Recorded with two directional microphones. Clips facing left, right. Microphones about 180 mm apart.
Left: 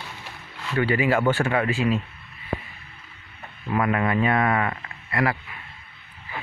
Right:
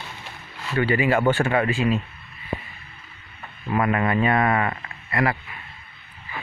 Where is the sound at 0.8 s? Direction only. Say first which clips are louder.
Right 1 dB; 5° left (ahead or behind).